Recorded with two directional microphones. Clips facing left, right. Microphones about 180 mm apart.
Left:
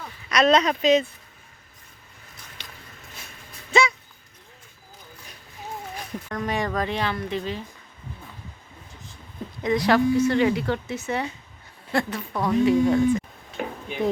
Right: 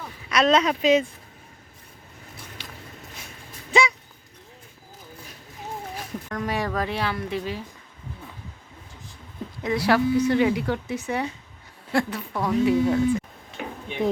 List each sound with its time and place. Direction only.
0.0 s speech: 5° right (ahead or behind)
2.6 s a sound: 10° right (ahead or behind)
3.7 s dog: 15° right (ahead or behind)
6.3 s speech: 5° right (ahead or behind)
9.6 s speech: 5° right (ahead or behind)
13.6 s a sound: 45° left (ahead or behind)